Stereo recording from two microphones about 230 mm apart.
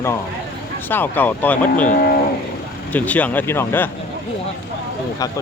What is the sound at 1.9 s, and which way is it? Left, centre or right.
Speech, left.